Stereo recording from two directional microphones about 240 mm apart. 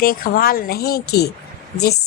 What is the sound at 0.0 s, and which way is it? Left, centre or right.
A woman's voice, left.